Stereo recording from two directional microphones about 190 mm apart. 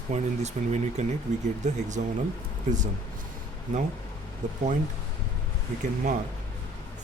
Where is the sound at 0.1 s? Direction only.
35° right (ahead or behind).